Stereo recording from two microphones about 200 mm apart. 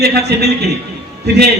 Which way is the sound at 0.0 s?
55° right (ahead or behind).